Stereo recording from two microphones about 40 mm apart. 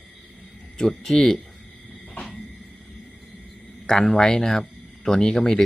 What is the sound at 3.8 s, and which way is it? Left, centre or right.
A man's voice, centre.